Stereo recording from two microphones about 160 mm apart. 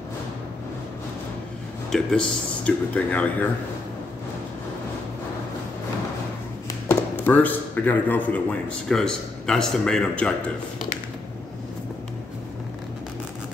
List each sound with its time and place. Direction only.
1.9 s a man's voice: 5° left (ahead or behind)
6.9 s a man's voice: 10° left (ahead or behind)